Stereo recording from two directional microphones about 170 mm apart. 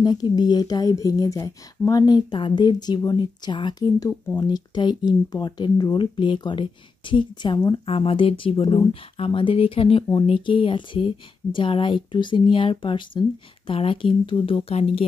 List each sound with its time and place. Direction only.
0.0 s speech: 25° left (ahead or behind)